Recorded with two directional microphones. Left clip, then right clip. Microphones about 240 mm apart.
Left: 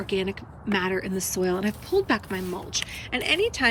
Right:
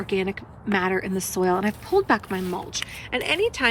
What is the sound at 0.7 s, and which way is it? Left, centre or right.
Speech, left.